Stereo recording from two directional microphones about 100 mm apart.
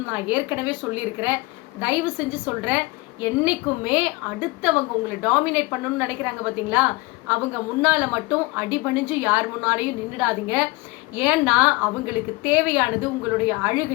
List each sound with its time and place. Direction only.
0.0 s a woman's voice: 15° right (ahead or behind)